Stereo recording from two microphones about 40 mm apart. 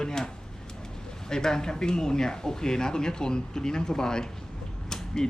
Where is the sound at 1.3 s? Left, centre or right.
Centre.